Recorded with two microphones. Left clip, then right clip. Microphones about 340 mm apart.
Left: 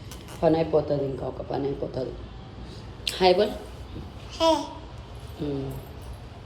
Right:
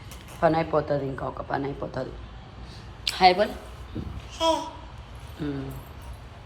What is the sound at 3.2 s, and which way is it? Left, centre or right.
Speech, centre.